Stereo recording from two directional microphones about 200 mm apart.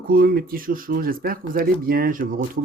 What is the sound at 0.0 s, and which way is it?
Speech, 45° right (ahead or behind).